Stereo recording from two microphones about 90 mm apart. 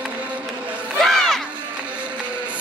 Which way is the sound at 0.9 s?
5° left (ahead or behind).